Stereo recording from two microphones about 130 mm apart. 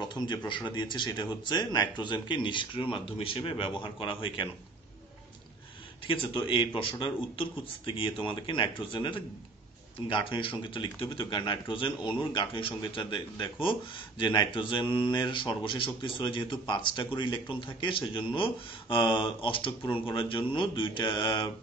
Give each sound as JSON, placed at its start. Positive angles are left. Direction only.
{"t": 0.0, "sound": "a sound", "side_deg": 35}
{"t": 0.5, "sound": "speech", "side_deg": 35}
{"t": 6.0, "sound": "speech", "side_deg": 40}